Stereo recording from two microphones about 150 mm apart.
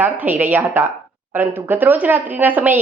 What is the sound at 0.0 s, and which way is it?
A woman's voice, 10° right (ahead or behind).